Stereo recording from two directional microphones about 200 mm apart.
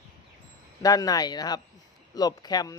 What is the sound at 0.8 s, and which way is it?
Speech, 20° left (ahead or behind).